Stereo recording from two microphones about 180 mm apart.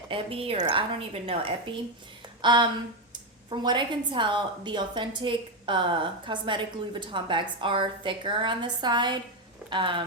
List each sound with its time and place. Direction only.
0.1 s a woman's voice: 30° right (ahead or behind)